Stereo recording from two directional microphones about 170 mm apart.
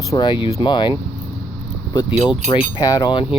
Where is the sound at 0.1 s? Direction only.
25° left (ahead or behind).